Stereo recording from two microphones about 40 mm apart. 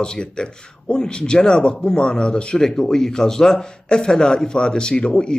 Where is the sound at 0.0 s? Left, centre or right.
Left.